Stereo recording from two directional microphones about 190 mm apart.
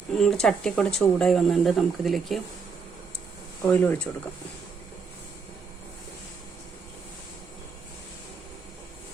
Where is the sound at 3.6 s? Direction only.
10° left (ahead or behind).